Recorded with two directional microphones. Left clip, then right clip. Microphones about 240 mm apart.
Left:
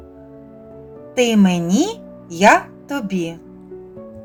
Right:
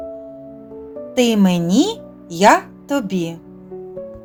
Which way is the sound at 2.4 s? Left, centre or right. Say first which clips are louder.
Even; right.